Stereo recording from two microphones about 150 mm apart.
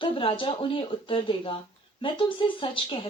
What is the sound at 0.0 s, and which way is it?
Speech, 35° left (ahead or behind).